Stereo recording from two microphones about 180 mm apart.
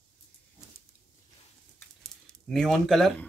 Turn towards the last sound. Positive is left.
turn(degrees=0)  # may be behind; listen again after turning